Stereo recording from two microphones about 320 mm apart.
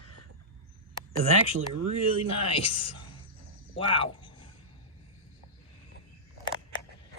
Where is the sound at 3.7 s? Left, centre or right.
Centre.